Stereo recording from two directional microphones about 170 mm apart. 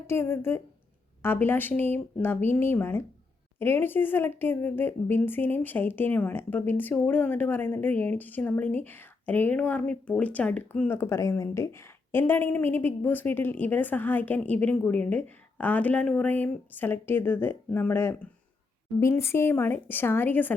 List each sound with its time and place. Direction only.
0.1 s speech: 15° left (ahead or behind)